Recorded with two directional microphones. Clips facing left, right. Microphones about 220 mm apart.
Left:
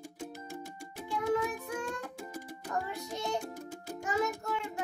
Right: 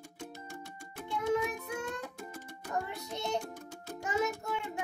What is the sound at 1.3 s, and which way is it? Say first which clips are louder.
Music: even; 20° right (ahead or behind).